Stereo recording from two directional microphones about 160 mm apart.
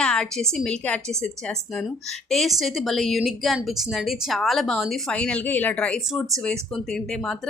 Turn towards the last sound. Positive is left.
turn(degrees=5)  # may be behind; listen again after turning